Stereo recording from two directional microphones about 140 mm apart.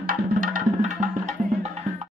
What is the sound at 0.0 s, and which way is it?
Music, 75° right (ahead or behind).